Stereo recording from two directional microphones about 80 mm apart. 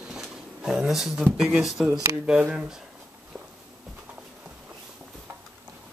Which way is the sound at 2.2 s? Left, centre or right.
Centre.